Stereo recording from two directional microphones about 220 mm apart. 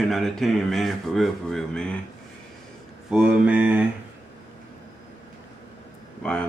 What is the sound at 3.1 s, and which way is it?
Speech, 5° right (ahead or behind).